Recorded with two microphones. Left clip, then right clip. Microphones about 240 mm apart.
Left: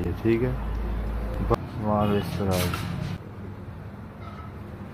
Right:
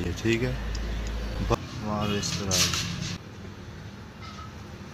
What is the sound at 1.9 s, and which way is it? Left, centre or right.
Speech, centre.